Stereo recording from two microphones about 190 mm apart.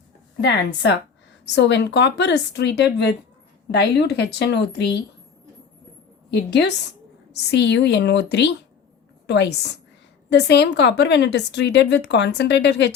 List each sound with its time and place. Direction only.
0.4 s a woman's voice: 65° left (ahead or behind)
6.3 s a woman's voice: 65° left (ahead or behind)